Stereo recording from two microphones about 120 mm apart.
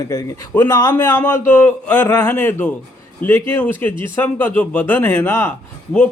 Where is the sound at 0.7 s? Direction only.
35° left (ahead or behind).